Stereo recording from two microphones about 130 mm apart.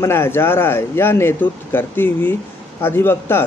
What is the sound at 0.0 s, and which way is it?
Speech, 20° left (ahead or behind).